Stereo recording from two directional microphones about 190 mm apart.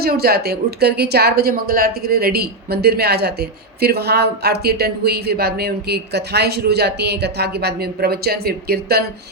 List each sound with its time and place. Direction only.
0.0 s speech: 55° right (ahead or behind)